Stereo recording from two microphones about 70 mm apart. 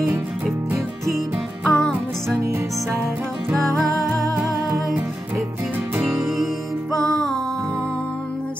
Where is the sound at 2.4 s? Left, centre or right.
Right.